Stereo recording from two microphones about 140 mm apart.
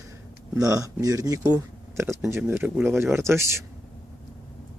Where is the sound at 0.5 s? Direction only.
25° right (ahead or behind).